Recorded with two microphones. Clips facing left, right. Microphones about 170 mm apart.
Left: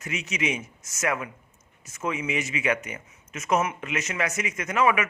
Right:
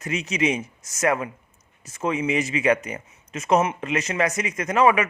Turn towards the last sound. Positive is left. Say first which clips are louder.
# right 4 dB
turn(degrees=-35)  # may be behind; listen again after turning